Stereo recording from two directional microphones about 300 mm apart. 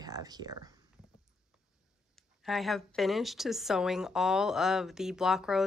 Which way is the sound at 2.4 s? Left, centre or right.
Centre.